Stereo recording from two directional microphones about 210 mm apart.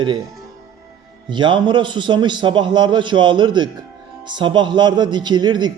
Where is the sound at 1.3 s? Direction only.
20° right (ahead or behind).